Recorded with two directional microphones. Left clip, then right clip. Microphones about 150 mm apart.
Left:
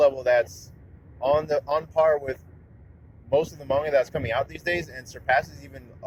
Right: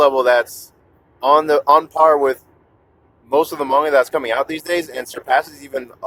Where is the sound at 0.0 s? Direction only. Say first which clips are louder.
Right 7 dB; 50° right (ahead or behind).